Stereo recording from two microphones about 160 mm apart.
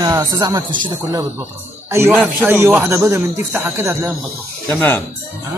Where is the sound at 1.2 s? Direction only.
15° right (ahead or behind).